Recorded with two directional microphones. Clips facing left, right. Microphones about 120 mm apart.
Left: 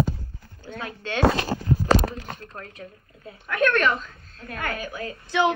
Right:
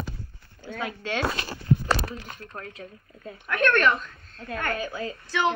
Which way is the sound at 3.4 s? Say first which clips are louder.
Even; centre (ahead or behind).